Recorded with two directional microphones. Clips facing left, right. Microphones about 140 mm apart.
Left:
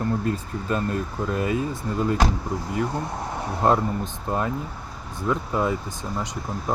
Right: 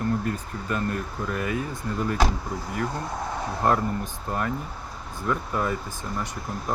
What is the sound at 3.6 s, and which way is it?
Speech, 20° left (ahead or behind).